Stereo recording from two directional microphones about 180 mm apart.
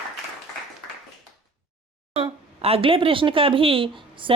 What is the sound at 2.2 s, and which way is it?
Speech, 35° right (ahead or behind).